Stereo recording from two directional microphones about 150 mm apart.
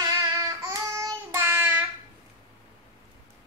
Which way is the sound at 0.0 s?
25° right (ahead or behind).